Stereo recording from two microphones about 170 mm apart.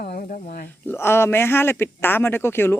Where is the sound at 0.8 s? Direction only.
15° left (ahead or behind).